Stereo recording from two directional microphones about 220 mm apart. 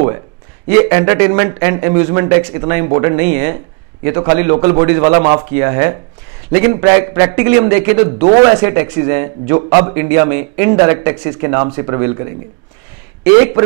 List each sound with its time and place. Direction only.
0.7 s a man's voice: 15° right (ahead or behind)